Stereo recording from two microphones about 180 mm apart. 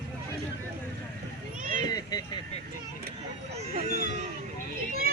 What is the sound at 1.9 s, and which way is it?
Vehicle, 20° left (ahead or behind).